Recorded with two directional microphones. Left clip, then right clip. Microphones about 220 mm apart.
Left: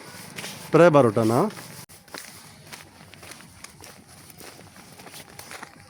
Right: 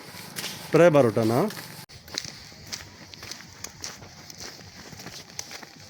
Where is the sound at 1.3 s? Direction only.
10° left (ahead or behind).